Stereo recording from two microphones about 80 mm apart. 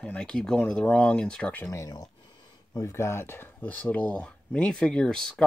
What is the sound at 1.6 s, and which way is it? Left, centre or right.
Speech, left.